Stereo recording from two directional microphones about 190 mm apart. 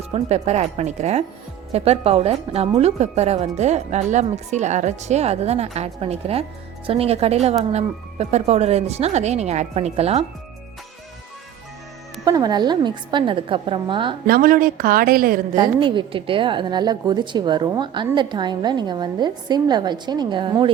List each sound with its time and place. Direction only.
0.1 s a woman's voice: 35° right (ahead or behind)
12.2 s a woman's voice: 20° right (ahead or behind)
14.3 s speech: 50° right (ahead or behind)
15.5 s a woman's voice: 25° right (ahead or behind)